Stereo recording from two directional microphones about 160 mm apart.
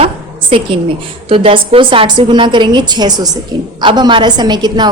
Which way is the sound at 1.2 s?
35° right (ahead or behind).